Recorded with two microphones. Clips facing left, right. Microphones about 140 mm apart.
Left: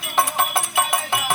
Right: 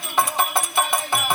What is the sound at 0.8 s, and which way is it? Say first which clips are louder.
Music: even; 5° left (ahead or behind).